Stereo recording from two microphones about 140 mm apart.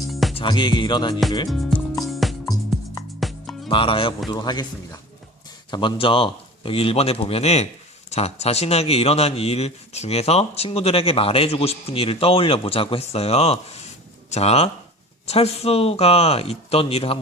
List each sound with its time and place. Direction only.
0.1 s music: centre (ahead or behind)
0.3 s music: 35° left (ahead or behind)
1.5 s music: centre (ahead or behind)
3.7 s music: 40° left (ahead or behind)
4.3 s a man's voice: 30° left (ahead or behind)